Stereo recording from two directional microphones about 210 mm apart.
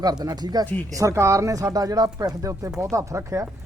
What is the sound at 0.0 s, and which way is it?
Speech, 20° right (ahead or behind).